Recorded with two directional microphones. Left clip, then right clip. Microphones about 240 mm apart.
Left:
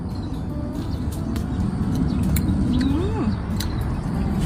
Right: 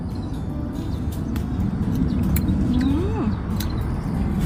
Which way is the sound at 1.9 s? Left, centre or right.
Centre.